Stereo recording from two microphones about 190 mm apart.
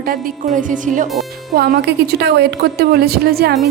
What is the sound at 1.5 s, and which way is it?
A woman's voice, 55° right (ahead or behind).